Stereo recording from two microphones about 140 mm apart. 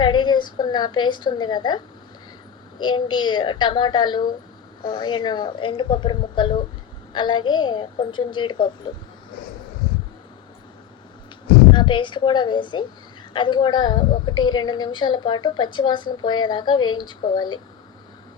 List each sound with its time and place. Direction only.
0.0 s a woman's voice: 35° left (ahead or behind)
11.7 s a woman's voice: 35° left (ahead or behind)